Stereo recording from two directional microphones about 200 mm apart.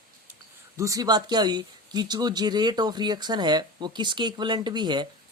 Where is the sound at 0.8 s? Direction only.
15° right (ahead or behind).